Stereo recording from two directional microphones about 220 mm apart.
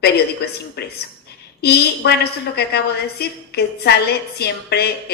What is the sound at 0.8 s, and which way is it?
A woman's voice, 50° left (ahead or behind).